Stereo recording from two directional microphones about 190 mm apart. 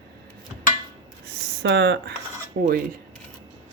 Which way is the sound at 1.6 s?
65° right (ahead or behind).